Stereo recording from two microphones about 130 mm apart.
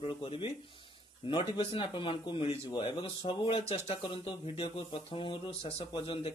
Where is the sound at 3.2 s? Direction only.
45° left (ahead or behind).